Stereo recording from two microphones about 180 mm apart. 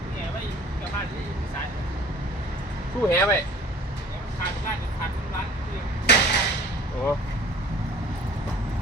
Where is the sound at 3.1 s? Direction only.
15° left (ahead or behind).